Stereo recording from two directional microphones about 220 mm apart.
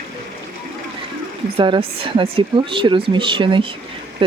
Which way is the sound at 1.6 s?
25° right (ahead or behind).